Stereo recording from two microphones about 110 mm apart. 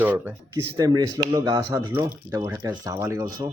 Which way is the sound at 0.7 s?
35° right (ahead or behind).